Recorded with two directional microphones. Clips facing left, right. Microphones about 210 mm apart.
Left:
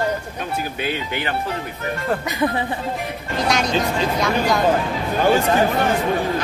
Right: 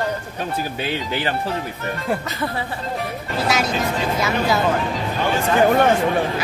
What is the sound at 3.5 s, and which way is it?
Speech, 5° right (ahead or behind).